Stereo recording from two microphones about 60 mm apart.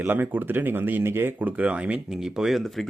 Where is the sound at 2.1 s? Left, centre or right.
Centre.